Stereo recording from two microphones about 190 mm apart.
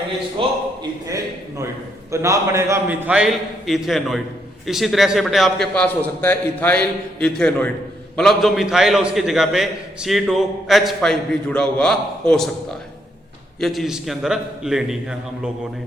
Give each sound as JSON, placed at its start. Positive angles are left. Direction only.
{"t": 0.4, "sound": "a man's voice", "side_deg": -25}
{"t": 1.0, "sound": "a sound", "side_deg": -15}
{"t": 2.1, "sound": "a man's voice", "side_deg": -15}
{"t": 13.6, "sound": "a man's voice", "side_deg": 0}